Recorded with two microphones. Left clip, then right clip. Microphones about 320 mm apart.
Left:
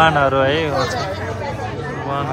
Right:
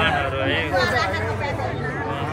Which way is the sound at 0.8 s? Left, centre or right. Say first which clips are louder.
Right 1 dB; right.